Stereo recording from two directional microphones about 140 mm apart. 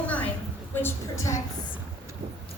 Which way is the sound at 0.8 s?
20° left (ahead or behind).